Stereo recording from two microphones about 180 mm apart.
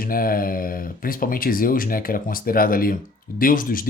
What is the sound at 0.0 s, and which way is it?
Speech, 55° left (ahead or behind).